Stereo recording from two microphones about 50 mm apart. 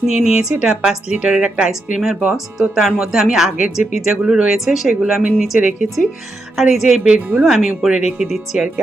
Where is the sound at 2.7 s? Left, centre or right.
Centre.